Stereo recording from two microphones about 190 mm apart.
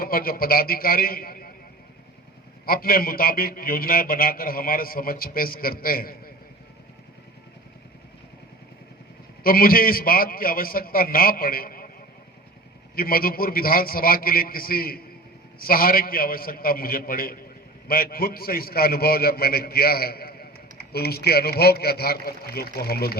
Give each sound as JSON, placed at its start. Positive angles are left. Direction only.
{"t": 0.0, "sound": "a man's voice", "side_deg": 50}
{"t": 2.6, "sound": "a man's voice", "side_deg": 50}
{"t": 9.4, "sound": "a man's voice", "side_deg": 50}
{"t": 13.0, "sound": "a man's voice", "side_deg": 50}